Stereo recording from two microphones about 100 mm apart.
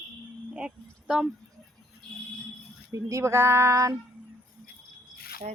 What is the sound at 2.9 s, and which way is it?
Speech, 30° right (ahead or behind).